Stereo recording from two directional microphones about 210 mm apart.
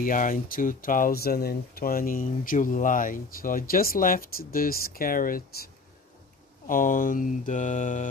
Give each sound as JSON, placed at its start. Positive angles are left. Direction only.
{"t": 0.0, "sound": "speech", "side_deg": 40}
{"t": 6.7, "sound": "speech", "side_deg": 40}